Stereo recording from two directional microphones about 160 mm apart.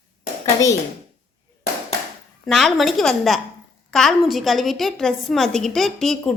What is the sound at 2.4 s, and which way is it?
A woman's voice, centre (ahead or behind).